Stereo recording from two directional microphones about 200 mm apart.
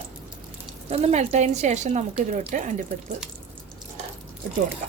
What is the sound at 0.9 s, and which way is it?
A woman's voice, 35° right (ahead or behind).